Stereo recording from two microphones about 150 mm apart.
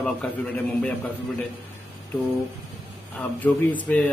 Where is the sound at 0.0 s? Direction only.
10° left (ahead or behind).